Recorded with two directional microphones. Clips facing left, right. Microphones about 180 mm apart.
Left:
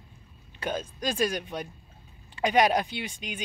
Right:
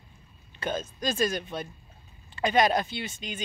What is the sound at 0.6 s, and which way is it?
Speech, 10° left (ahead or behind).